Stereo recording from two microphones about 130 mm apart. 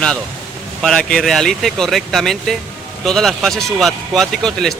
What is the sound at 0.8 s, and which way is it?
Speech, 5° left (ahead or behind).